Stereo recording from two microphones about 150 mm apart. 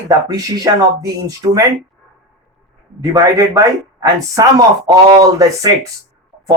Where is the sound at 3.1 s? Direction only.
25° right (ahead or behind).